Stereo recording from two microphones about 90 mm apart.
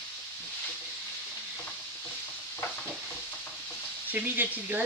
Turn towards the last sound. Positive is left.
turn(degrees=-20)  # may be behind; listen again after turning